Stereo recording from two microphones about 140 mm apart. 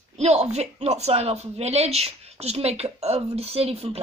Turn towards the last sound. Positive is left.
turn(degrees=-45)  # may be behind; listen again after turning